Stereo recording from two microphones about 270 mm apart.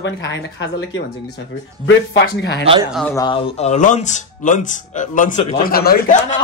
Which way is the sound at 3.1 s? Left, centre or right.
Centre.